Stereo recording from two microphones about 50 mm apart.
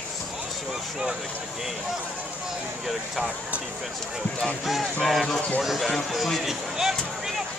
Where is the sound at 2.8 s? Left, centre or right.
Centre.